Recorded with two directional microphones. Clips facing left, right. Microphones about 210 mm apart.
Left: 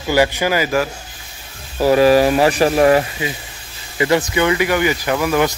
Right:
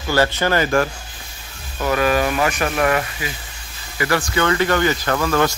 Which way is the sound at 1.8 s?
30° left (ahead or behind).